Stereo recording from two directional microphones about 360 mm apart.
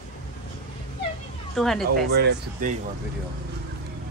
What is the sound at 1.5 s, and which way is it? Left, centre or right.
Speech, centre.